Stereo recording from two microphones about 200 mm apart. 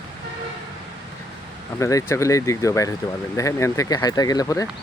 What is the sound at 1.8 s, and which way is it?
Speech, 15° left (ahead or behind).